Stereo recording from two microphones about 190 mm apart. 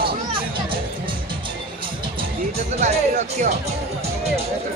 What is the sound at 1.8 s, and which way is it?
Speech, 30° right (ahead or behind).